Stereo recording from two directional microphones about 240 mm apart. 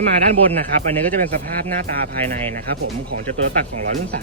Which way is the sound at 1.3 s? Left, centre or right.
Right.